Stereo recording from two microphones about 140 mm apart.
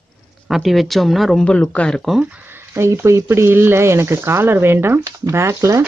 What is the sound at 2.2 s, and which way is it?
Speech, 15° right (ahead or behind).